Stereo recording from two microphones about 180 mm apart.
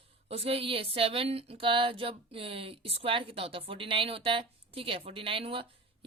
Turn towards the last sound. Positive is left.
turn(degrees=-30)  # may be behind; listen again after turning